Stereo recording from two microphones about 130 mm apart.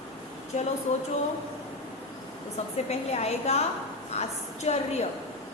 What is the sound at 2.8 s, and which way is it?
A woman's voice, 55° left (ahead or behind).